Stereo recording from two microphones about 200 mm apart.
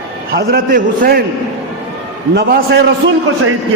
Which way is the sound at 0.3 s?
50° right (ahead or behind).